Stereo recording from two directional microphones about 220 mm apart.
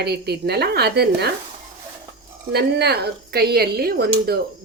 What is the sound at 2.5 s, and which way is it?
Speech, 45° right (ahead or behind).